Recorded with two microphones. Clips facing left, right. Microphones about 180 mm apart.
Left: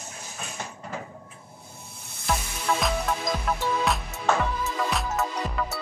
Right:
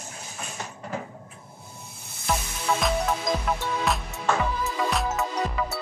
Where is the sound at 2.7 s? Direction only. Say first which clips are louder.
Right 1 dB; centre (ahead or behind).